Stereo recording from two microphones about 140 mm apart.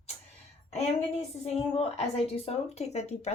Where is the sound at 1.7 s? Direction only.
45° left (ahead or behind).